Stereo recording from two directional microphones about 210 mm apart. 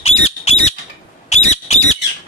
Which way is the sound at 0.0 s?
30° left (ahead or behind).